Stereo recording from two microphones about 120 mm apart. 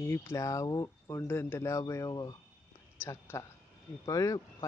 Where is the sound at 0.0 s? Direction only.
25° left (ahead or behind).